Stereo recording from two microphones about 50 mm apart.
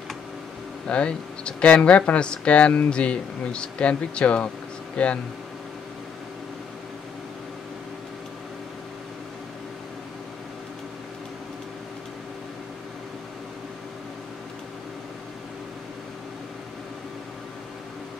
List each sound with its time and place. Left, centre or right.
0.8 s speech: left